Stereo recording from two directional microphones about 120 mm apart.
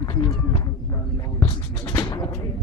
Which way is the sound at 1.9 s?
30° left (ahead or behind).